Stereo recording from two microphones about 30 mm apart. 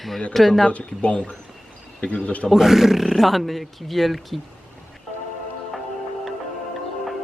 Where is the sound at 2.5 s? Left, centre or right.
Centre.